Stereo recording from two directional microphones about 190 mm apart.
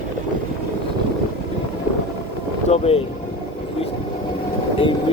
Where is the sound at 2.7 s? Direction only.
30° left (ahead or behind).